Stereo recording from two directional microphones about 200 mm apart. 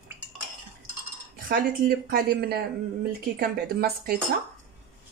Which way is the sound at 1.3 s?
45° right (ahead or behind).